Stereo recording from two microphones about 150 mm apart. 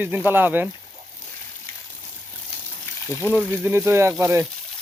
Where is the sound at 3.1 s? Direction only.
15° left (ahead or behind).